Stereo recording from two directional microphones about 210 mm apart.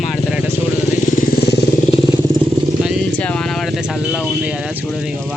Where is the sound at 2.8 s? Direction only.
5° left (ahead or behind).